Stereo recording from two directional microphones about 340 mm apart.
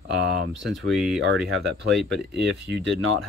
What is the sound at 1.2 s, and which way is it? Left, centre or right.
Speech, right.